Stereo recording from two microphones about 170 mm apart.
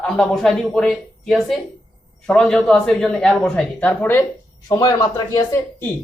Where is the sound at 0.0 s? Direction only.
5° left (ahead or behind).